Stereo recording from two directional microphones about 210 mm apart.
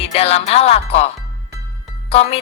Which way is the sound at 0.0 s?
30° left (ahead or behind).